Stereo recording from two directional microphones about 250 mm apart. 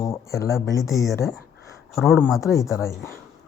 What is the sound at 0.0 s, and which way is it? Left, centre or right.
Speech, centre.